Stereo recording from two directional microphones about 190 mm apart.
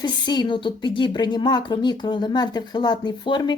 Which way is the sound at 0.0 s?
25° left (ahead or behind).